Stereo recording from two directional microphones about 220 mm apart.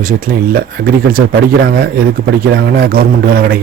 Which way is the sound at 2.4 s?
40° right (ahead or behind).